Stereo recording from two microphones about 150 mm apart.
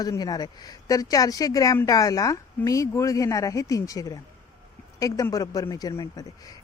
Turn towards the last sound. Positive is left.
turn(degrees=25)  # may be behind; listen again after turning